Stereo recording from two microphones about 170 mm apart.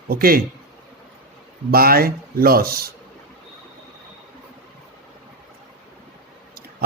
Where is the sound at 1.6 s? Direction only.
60° right (ahead or behind).